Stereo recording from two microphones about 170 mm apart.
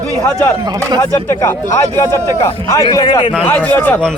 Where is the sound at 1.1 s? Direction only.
20° left (ahead or behind).